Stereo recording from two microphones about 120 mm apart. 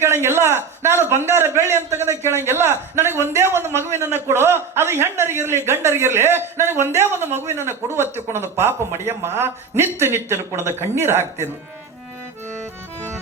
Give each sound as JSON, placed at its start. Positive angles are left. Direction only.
{"t": 0.0, "sound": "a man's voice", "side_deg": -20}